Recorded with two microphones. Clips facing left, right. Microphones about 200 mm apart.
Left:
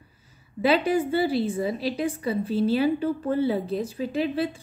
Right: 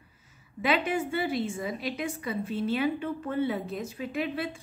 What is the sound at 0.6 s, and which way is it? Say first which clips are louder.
A woman's voice: left 6 dB; 35° left (ahead or behind).